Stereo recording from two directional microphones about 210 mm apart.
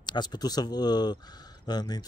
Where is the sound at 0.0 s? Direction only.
20° left (ahead or behind).